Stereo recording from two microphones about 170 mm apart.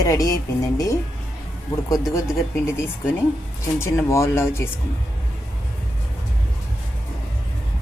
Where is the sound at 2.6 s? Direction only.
15° left (ahead or behind).